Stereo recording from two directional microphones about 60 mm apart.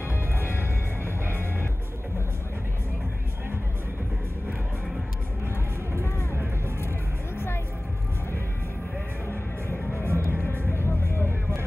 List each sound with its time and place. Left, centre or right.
0.4 s music: left
9.9 s music: right
10.7 s vehicle: left